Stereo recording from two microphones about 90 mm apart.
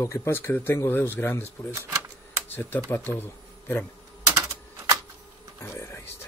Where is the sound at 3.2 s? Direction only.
20° left (ahead or behind).